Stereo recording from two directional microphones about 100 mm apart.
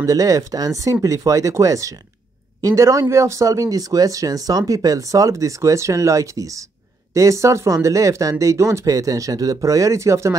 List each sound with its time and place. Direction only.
0.0 s speech: 35° right (ahead or behind)